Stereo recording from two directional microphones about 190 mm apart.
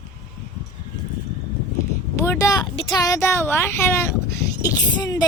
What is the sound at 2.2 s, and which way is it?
A woman's voice, 15° left (ahead or behind).